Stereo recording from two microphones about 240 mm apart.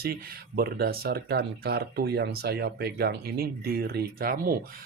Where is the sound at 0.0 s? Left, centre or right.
Right.